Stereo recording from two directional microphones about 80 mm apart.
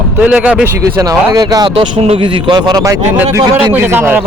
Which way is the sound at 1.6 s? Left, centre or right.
Right.